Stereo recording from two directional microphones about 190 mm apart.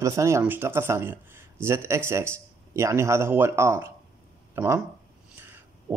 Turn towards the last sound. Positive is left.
turn(degrees=-15)  # may be behind; listen again after turning